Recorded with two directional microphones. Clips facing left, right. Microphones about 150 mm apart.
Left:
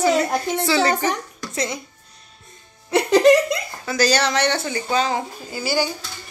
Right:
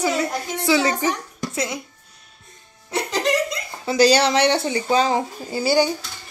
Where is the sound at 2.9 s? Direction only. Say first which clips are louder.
Left 8 dB; 65° left (ahead or behind).